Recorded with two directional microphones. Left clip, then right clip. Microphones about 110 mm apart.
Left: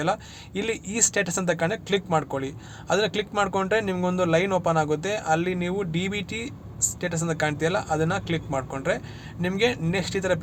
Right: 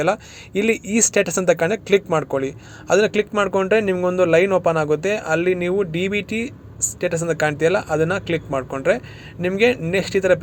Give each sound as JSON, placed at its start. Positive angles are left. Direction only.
{"t": 0.0, "sound": "speech", "side_deg": -40}
{"t": 2.0, "sound": "speech", "side_deg": -30}